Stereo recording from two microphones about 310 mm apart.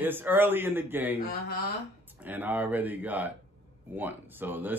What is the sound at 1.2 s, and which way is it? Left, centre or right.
Speech, left.